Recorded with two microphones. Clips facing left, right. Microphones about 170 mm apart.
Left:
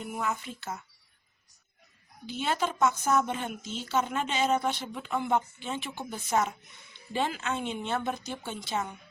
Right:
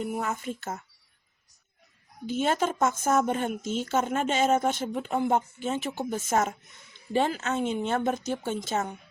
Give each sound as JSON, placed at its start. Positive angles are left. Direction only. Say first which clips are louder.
{"t": 0.0, "sound": "speech", "louder": "right 3 dB", "side_deg": -45}
{"t": 2.2, "sound": "speech", "louder": "right 5 dB", "side_deg": -45}